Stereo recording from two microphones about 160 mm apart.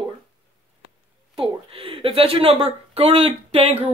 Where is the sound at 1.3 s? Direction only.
35° right (ahead or behind).